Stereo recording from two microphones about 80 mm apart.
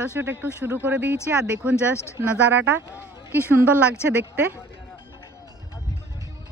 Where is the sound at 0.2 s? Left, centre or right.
Right.